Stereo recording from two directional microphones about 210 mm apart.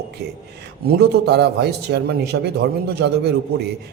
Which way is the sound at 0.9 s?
50° right (ahead or behind).